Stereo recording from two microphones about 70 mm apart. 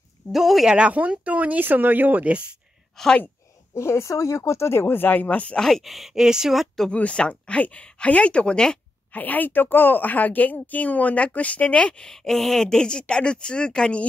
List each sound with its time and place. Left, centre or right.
0.3 s speech: centre
0.7 s speech: centre
3.0 s speech: centre
3.7 s speech: left
5.6 s speech: centre
6.9 s speech: centre
9.1 s a woman's voice: left